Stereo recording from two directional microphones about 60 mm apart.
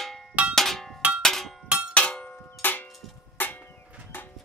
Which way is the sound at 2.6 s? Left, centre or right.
Left.